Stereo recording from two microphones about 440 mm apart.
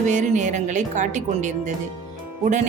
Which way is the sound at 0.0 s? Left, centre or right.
Centre.